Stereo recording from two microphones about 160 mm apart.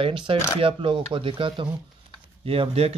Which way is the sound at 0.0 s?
35° right (ahead or behind).